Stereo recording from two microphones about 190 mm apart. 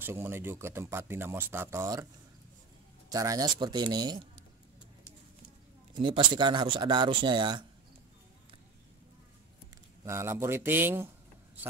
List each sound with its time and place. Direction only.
0.0 s speech: 10° right (ahead or behind)
3.1 s speech: 20° right (ahead or behind)
5.9 s speech: 25° right (ahead or behind)
10.0 s speech: 15° right (ahead or behind)